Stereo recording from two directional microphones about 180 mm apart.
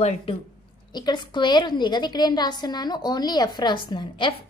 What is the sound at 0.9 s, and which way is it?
A woman's voice, 25° left (ahead or behind).